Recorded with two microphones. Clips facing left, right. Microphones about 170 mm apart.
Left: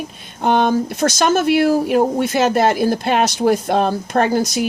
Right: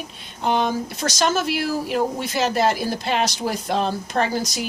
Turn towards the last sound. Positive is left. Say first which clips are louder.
# left 6 dB
turn(degrees=50)  # may be behind; listen again after turning